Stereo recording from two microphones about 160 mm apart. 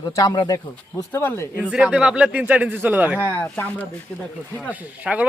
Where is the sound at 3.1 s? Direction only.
15° left (ahead or behind).